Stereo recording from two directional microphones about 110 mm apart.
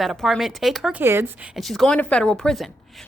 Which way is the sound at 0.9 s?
20° right (ahead or behind).